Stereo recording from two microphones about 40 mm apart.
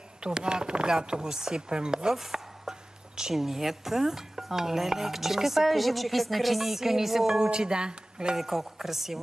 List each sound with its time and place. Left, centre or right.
0.2 s chopping: right
2.1 s chopping: centre
3.2 s speech: centre
7.3 s chopping: centre
8.4 s speech: centre